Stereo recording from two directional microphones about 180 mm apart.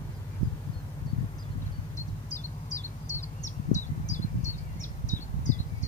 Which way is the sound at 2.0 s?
40° left (ahead or behind).